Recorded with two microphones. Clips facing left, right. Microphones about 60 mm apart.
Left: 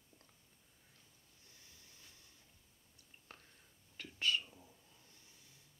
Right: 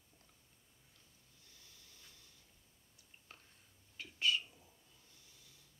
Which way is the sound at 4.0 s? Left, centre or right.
Left.